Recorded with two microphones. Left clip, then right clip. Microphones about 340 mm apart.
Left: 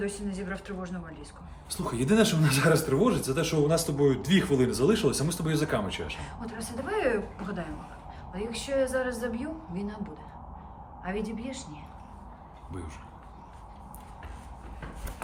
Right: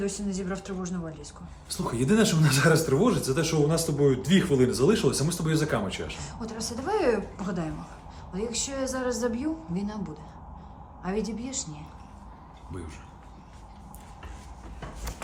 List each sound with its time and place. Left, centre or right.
0.0 s a woman's voice: centre
1.7 s a woman's voice: centre
11.0 s a woman's voice: centre